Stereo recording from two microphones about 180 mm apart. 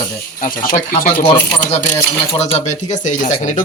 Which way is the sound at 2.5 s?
40° left (ahead or behind).